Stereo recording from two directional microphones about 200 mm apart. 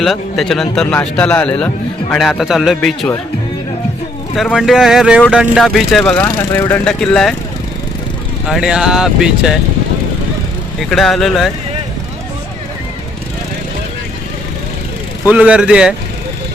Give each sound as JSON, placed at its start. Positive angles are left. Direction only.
{"t": 0.0, "sound": "a man's voice", "side_deg": 0}
{"t": 4.4, "sound": "a man's voice", "side_deg": 0}
{"t": 8.4, "sound": "a man's voice", "side_deg": 0}
{"t": 10.8, "sound": "a man's voice", "side_deg": 0}
{"t": 15.3, "sound": "a man's voice", "side_deg": -5}